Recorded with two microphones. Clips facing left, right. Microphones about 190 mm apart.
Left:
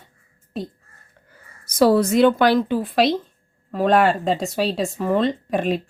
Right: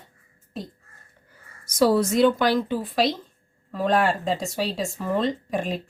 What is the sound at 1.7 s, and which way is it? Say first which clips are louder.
A woman's voice: left 3 dB; 60° left (ahead or behind).